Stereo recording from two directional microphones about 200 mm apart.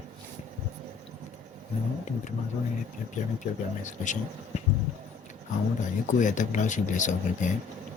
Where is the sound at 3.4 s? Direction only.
40° left (ahead or behind).